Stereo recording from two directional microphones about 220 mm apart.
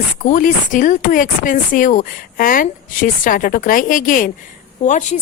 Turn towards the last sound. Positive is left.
turn(degrees=35)  # may be behind; listen again after turning